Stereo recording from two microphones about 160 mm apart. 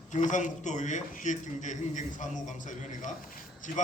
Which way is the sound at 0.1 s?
50° left (ahead or behind).